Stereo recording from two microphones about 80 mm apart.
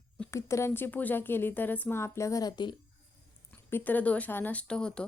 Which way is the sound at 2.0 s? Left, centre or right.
Left.